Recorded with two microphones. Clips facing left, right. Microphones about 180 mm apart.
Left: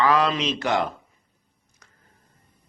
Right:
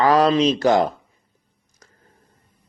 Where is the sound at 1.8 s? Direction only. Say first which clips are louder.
Right 5 dB; 40° right (ahead or behind).